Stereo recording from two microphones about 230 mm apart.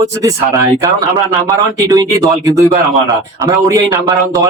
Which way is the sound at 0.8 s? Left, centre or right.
Centre.